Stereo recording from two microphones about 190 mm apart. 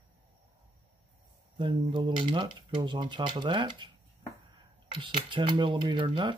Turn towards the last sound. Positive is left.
turn(degrees=-25)  # may be behind; listen again after turning